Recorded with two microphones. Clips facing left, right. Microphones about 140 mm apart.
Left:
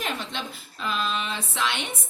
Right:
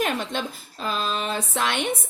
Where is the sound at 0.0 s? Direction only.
45° right (ahead or behind).